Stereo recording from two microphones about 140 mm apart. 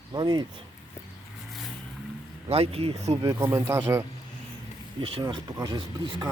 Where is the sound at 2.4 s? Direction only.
45° right (ahead or behind).